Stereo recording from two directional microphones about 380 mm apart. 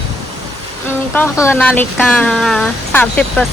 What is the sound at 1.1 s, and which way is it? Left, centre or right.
Speech, centre.